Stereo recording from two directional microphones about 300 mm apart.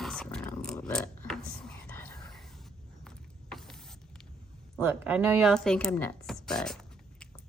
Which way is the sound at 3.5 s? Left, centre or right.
Centre.